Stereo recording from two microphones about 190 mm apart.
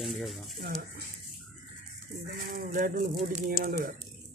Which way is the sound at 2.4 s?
55° right (ahead or behind).